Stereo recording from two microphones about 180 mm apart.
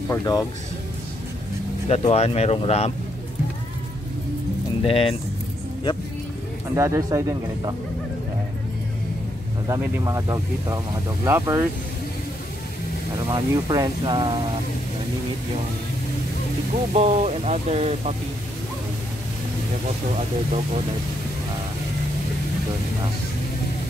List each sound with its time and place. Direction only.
0.1 s speech: 20° left (ahead or behind)
1.9 s speech: 35° left (ahead or behind)
4.8 s speech: 30° left (ahead or behind)
6.7 s speech: 15° right (ahead or behind)
9.7 s speech: 20° right (ahead or behind)
13.3 s speech: 25° right (ahead or behind)
16.9 s speech: 40° right (ahead or behind)
20.2 s speech: 35° right (ahead or behind)